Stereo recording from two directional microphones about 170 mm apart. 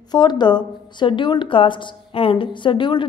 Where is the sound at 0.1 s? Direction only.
25° left (ahead or behind).